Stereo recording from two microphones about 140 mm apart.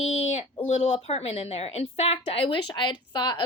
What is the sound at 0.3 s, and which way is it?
A woman's voice, 50° left (ahead or behind).